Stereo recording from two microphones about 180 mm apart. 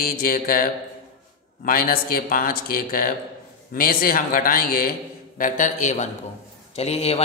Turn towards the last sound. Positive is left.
turn(degrees=35)  # may be behind; listen again after turning